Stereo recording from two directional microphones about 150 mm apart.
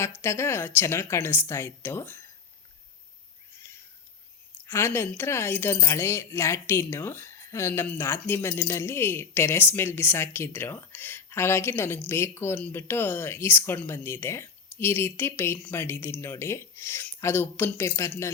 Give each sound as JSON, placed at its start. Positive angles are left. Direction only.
{"t": 0.2, "sound": "a woman's voice", "side_deg": 15}
{"t": 3.6, "sound": "a sound", "side_deg": 15}
{"t": 4.6, "sound": "a woman's voice", "side_deg": 15}